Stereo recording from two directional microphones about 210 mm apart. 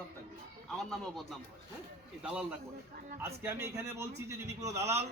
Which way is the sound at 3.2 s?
10° right (ahead or behind).